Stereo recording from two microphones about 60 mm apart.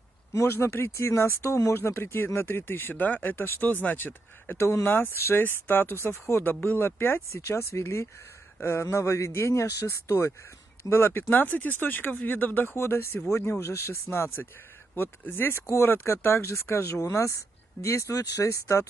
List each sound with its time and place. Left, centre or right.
0.3 s speech: left
0.6 s speech: left
6.5 s speech: left
10.8 s speech: left
12.7 s speech: left